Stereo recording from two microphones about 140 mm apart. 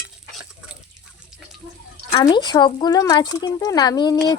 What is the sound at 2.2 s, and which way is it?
Speech, 30° left (ahead or behind).